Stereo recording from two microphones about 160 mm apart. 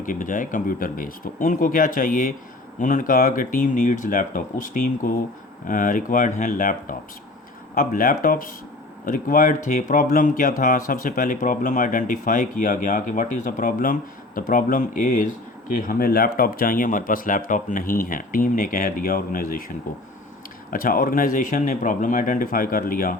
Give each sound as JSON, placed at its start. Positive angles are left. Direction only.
{"t": 0.0, "sound": "speech", "side_deg": 55}